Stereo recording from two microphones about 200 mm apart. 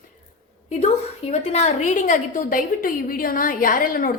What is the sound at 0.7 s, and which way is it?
A woman's voice, 35° left (ahead or behind).